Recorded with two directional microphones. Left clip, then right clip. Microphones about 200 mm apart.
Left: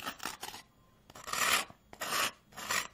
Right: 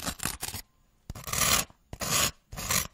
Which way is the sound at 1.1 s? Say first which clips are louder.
Right 3 dB; 65° right (ahead or behind).